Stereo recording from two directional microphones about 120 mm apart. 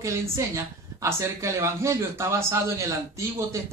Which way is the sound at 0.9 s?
25° right (ahead or behind).